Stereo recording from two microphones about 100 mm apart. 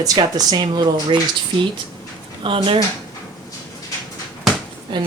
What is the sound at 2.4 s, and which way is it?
Speech, 55° right (ahead or behind).